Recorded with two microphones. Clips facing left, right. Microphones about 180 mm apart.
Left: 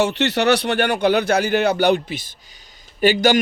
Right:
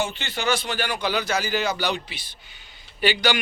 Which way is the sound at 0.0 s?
75° left (ahead or behind).